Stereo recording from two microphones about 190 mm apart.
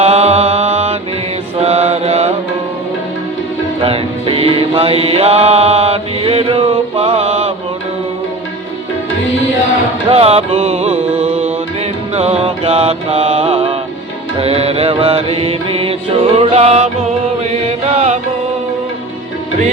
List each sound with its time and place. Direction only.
0.0 s mantra: 30° right (ahead or behind)
3.8 s music: 30° right (ahead or behind)
10.1 s music: 30° right (ahead or behind)